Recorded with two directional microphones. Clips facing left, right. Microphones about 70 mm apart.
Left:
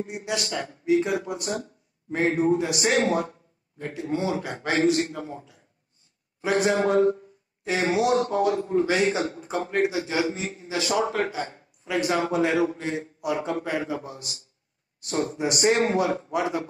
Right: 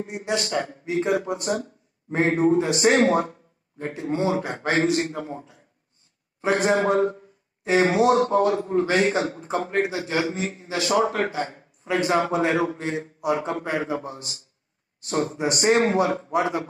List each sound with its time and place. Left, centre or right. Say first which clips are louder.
0.1 s a man's voice: right 4 dB; right